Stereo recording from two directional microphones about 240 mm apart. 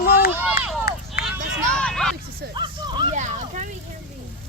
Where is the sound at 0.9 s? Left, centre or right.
Left.